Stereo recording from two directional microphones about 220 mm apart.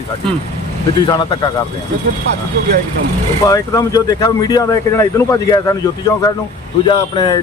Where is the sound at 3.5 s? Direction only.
15° left (ahead or behind).